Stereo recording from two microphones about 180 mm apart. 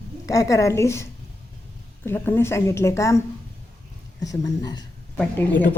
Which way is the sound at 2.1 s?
10° left (ahead or behind).